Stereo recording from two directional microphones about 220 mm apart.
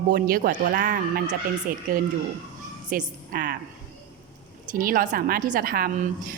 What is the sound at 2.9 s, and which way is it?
Speech, 40° right (ahead or behind).